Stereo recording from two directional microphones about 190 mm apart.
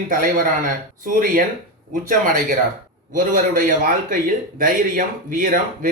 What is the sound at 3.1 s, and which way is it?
Speech, 45° right (ahead or behind).